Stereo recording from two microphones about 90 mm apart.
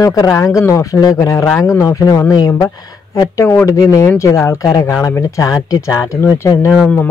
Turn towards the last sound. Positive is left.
turn(degrees=35)  # may be behind; listen again after turning